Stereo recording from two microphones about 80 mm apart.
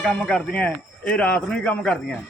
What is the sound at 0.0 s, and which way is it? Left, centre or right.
A man's voice, centre.